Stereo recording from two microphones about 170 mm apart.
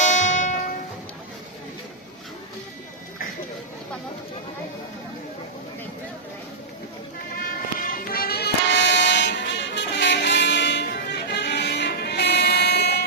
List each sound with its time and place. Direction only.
0.0 s music: 45° left (ahead or behind)
7.3 s music: 55° left (ahead or behind); by 13.0 s 70° left (ahead or behind)